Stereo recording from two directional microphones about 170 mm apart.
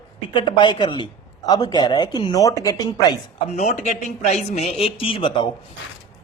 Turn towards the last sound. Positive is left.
turn(degrees=30)  # may be behind; listen again after turning